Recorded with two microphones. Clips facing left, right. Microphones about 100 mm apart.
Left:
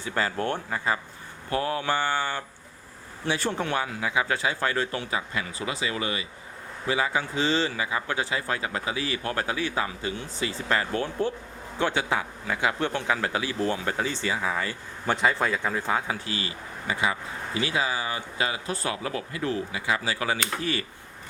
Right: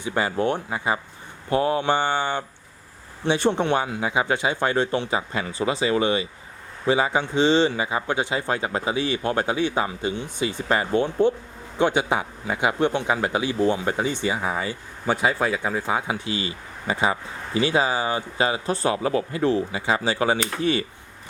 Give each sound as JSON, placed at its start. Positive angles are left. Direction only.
{"t": 0.0, "sound": "speech", "side_deg": -15}